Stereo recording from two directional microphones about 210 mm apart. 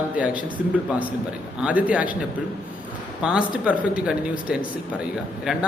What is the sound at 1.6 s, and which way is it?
Speech, 5° right (ahead or behind).